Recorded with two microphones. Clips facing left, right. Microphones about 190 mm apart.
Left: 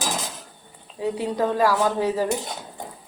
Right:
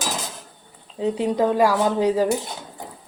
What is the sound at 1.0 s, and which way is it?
Speech, 20° right (ahead or behind).